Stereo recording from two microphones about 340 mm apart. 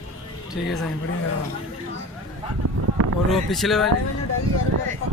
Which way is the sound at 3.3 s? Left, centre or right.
Centre.